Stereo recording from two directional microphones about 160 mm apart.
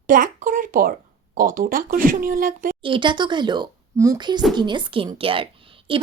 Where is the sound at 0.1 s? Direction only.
60° right (ahead or behind).